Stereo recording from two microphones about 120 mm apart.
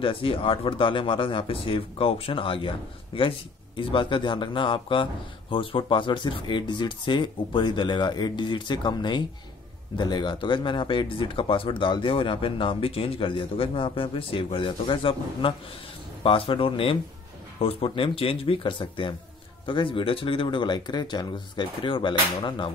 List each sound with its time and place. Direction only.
0.0 s speech: 50° left (ahead or behind)